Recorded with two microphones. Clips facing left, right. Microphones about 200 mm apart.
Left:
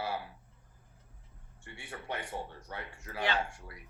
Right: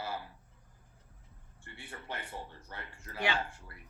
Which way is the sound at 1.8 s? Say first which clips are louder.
Left 4 dB; 10° left (ahead or behind).